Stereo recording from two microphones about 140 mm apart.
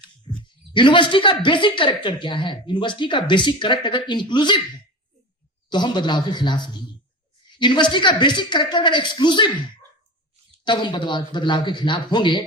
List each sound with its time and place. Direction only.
0.3 s a sound: 30° left (ahead or behind)
0.7 s a woman's voice: 35° left (ahead or behind)
5.6 s a woman's voice: 30° left (ahead or behind)
10.6 s a woman's voice: 35° left (ahead or behind)